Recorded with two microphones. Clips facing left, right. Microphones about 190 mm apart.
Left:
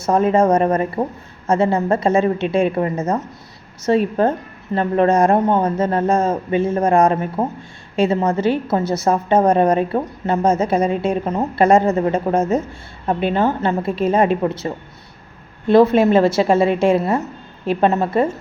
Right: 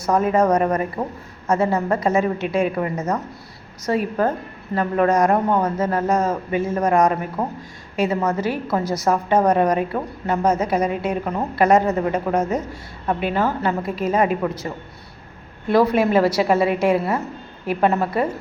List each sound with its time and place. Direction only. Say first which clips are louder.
0.0 s a woman's voice: left 3 dB; 25° left (ahead or behind)
15.7 s a woman's voice: left 4 dB; 25° left (ahead or behind)